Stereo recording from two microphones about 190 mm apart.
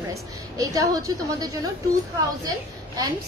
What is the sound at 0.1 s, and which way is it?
A woman's voice, 20° right (ahead or behind).